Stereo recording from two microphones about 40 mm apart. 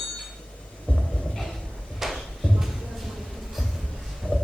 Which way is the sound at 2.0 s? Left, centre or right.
Centre.